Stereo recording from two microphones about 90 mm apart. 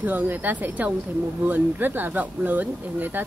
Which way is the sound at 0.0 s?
20° right (ahead or behind).